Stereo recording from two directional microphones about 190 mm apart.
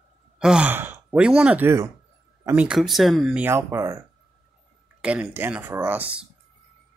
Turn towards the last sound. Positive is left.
turn(degrees=-10)  # may be behind; listen again after turning